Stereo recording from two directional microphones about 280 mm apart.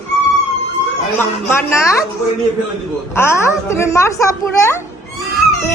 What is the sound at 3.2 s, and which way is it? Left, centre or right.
A woman's voice, centre.